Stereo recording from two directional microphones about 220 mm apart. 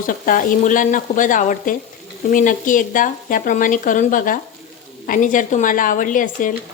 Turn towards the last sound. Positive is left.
turn(degrees=35)  # may be behind; listen again after turning